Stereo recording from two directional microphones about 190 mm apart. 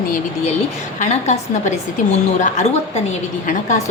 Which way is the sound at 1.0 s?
40° left (ahead or behind).